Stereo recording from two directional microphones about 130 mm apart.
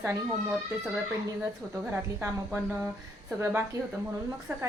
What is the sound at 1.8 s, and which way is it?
A woman's voice, 15° right (ahead or behind).